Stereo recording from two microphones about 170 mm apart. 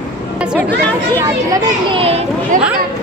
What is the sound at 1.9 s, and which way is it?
Speech, 35° right (ahead or behind).